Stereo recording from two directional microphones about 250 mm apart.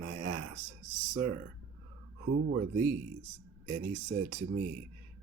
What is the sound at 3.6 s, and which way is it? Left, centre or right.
Speech, right.